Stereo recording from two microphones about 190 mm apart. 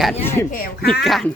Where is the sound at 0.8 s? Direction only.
Centre (ahead or behind).